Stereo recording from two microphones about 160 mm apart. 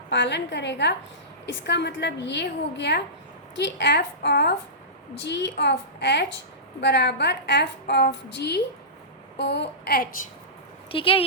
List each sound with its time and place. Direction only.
0.1 s a woman's voice: 90° left
9.4 s a sound: 90° left
10.9 s speech: 35° left (ahead or behind)